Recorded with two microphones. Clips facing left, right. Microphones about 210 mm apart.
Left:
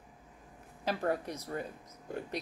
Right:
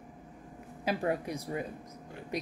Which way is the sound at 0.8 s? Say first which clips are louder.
Right 1 dB; 10° right (ahead or behind).